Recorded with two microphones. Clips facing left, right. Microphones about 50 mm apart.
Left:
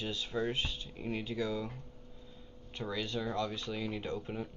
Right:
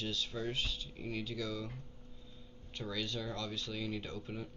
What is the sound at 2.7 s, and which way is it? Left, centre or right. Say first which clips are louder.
Speech: left 3 dB; centre.